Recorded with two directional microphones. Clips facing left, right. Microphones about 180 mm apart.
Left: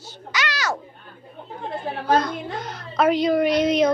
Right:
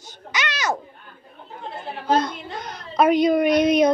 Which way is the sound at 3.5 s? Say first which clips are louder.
Right 2 dB; 25° left (ahead or behind).